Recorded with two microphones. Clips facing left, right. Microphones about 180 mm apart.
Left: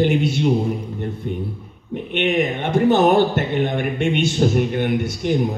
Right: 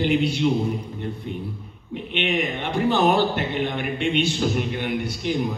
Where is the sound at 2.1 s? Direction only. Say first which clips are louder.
Left 5 dB; 45° left (ahead or behind).